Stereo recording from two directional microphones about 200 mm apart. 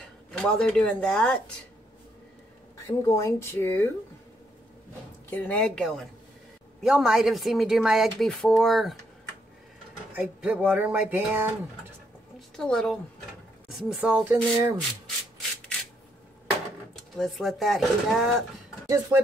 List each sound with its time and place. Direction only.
0.0 s speech: 5° left (ahead or behind)
2.9 s speech: 15° left (ahead or behind)
5.3 s speech: 5° left (ahead or behind)
10.1 s speech: 10° right (ahead or behind)
12.4 s a woman's voice: centre (ahead or behind)
17.2 s speech: centre (ahead or behind)
18.9 s speech: 15° right (ahead or behind)